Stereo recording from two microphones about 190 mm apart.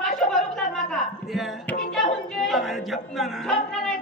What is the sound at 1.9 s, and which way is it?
Music, centre (ahead or behind).